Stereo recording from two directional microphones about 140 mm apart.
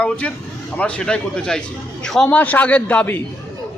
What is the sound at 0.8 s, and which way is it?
Speech, 10° left (ahead or behind).